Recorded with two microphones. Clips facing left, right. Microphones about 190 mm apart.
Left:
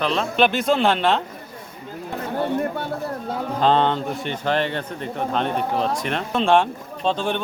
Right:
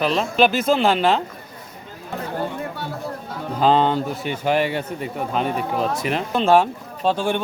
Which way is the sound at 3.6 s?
5° right (ahead or behind).